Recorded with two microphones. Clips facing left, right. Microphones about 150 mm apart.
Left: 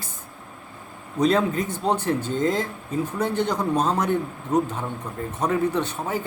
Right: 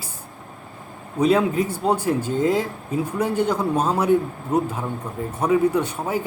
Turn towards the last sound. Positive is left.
turn(degrees=-10)  # may be behind; listen again after turning